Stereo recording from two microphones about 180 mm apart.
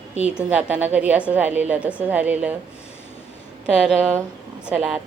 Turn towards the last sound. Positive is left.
turn(degrees=-5)  # may be behind; listen again after turning